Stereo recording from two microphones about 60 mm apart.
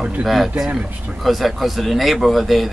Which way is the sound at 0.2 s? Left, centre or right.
Centre.